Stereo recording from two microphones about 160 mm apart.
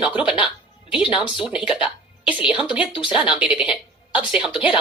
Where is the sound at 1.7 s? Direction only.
5° right (ahead or behind).